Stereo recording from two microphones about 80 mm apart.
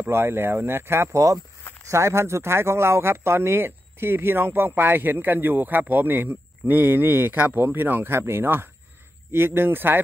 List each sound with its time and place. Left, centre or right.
0.1 s speech: right